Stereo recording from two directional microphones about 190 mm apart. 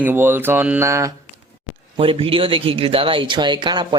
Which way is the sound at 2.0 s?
30° right (ahead or behind).